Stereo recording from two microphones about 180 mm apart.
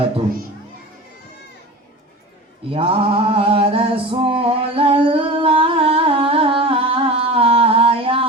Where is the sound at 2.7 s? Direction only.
30° right (ahead or behind).